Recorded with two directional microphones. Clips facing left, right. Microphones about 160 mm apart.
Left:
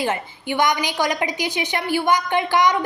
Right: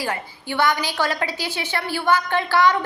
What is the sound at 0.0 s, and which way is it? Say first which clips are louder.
A woman's voice: left 4 dB; 20° left (ahead or behind).